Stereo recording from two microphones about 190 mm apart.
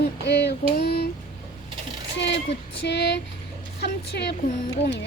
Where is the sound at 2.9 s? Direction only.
65° left (ahead or behind).